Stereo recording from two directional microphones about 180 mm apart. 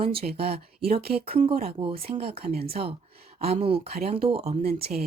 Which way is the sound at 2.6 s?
30° right (ahead or behind).